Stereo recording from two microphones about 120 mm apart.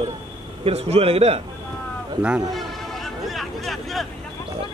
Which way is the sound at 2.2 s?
10° right (ahead or behind).